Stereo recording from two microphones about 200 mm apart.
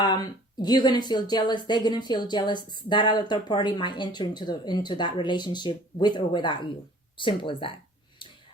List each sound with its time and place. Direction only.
0.6 s a woman's voice: 20° left (ahead or behind)